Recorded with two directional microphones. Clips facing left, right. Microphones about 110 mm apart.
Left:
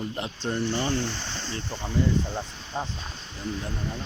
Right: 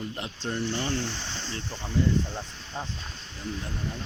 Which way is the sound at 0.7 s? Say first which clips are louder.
Left 3 dB; 15° left (ahead or behind).